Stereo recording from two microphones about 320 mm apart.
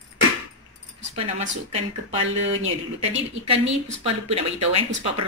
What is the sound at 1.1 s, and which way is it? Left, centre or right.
Speech, centre.